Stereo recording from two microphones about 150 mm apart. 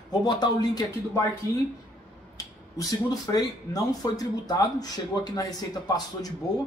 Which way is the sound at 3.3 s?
25° left (ahead or behind).